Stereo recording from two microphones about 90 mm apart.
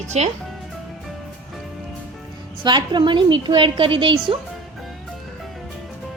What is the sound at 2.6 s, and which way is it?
A woman's voice, 55° right (ahead or behind).